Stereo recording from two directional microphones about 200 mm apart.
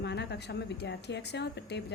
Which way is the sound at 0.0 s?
55° left (ahead or behind).